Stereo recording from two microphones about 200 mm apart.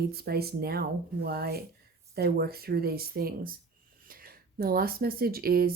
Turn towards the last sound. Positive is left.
turn(degrees=-50)  # may be behind; listen again after turning